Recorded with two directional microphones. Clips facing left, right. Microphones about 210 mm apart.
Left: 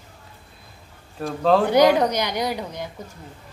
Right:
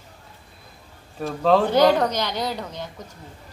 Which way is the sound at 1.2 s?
Centre (ahead or behind).